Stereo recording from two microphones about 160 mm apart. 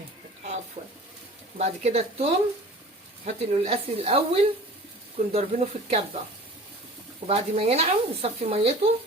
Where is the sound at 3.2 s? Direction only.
40° right (ahead or behind).